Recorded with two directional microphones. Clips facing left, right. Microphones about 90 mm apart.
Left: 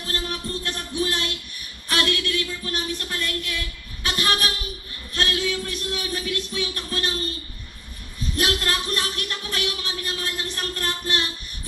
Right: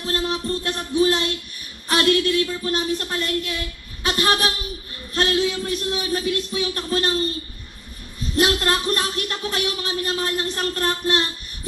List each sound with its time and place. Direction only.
0.0 s speech: 30° right (ahead or behind)
8.4 s speech: 35° right (ahead or behind)